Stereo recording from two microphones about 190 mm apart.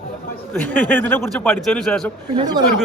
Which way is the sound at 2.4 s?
20° right (ahead or behind).